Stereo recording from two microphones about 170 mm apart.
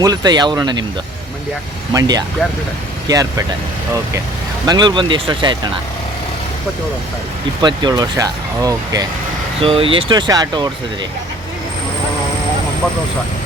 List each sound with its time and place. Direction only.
0.0 s speech: 25° right (ahead or behind)
1.9 s speech: 20° right (ahead or behind)
4.6 s speech: 25° right (ahead or behind)
7.6 s speech: 25° right (ahead or behind)
9.6 s speech: 35° right (ahead or behind)